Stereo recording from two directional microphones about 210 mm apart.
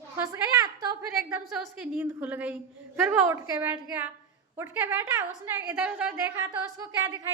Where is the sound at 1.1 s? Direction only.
Centre (ahead or behind).